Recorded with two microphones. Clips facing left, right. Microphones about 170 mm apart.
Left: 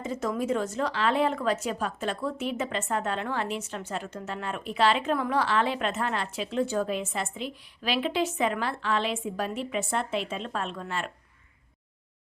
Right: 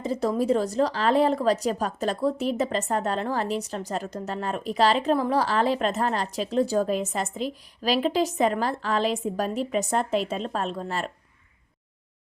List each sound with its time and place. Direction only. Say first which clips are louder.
0.0 s a woman's voice: right 5 dB; 35° right (ahead or behind)